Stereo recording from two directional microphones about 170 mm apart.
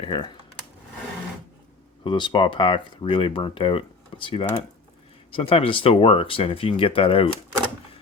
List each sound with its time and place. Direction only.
0.0 s speech: 30° left (ahead or behind)
2.0 s speech: 30° left (ahead or behind)